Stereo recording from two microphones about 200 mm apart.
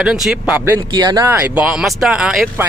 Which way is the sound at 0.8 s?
20° right (ahead or behind).